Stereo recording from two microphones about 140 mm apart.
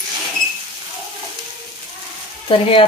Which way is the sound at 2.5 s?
40° left (ahead or behind).